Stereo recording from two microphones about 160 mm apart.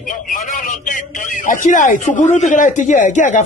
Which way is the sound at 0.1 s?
55° left (ahead or behind).